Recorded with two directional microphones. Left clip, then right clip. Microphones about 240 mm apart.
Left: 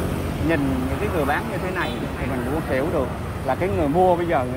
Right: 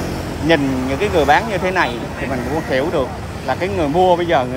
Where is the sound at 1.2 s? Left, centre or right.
Centre.